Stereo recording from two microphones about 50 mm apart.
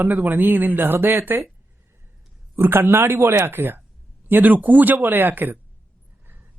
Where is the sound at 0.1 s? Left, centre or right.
Right.